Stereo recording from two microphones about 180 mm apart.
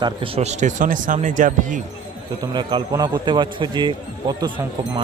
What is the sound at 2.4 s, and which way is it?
A man's voice, 25° right (ahead or behind).